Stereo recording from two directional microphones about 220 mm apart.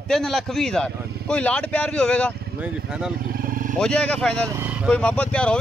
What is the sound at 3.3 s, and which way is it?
Vehicle, 40° right (ahead or behind).